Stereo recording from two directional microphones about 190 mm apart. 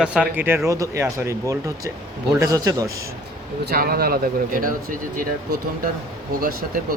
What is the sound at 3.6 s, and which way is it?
Speech, 55° right (ahead or behind).